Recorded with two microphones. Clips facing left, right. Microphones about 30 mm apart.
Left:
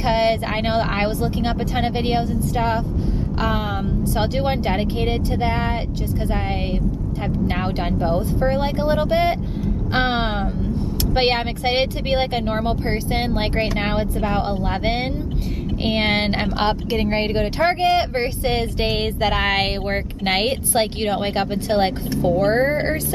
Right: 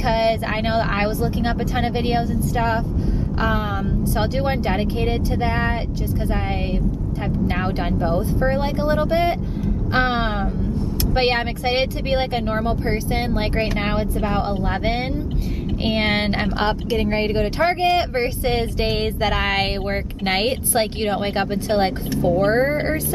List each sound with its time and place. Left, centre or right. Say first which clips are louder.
0.0 s speech: left 1 dB; centre
4.2 s speech: left 1 dB; centre
8.5 s speech: left 1 dB; centre
16.6 s speech: left 1 dB; centre